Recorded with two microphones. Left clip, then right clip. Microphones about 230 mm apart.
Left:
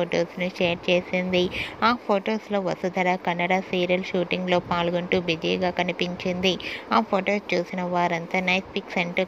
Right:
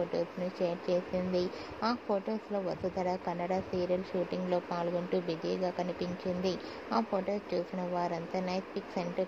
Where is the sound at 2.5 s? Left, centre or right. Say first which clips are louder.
Left 8 dB; left.